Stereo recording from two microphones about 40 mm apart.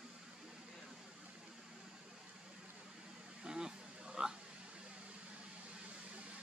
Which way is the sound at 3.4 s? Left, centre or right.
Centre.